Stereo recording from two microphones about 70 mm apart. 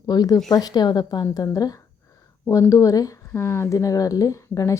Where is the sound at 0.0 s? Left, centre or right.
Left.